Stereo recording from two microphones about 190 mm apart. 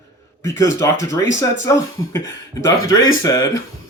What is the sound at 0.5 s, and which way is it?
Speech, 15° left (ahead or behind).